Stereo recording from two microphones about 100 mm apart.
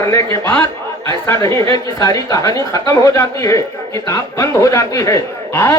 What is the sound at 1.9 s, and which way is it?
Speech, 35° left (ahead or behind).